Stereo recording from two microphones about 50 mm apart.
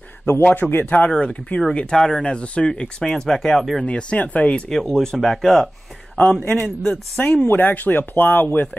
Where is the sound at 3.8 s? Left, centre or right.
Left.